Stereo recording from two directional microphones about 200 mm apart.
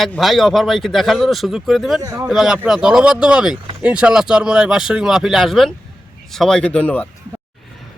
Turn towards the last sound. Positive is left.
turn(degrees=10)  # may be behind; listen again after turning